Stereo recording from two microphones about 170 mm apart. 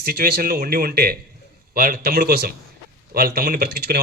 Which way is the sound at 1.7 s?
55° right (ahead or behind).